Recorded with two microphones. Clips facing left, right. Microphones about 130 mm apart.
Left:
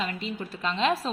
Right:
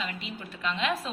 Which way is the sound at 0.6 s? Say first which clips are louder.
Left 4 dB; 35° left (ahead or behind).